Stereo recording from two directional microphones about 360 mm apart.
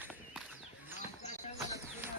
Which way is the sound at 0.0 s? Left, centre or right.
Centre.